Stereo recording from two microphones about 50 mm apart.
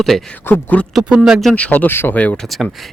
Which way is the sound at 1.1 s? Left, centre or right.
Centre.